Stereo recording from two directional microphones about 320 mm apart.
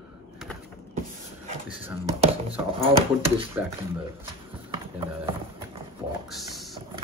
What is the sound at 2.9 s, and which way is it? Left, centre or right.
Speech, centre.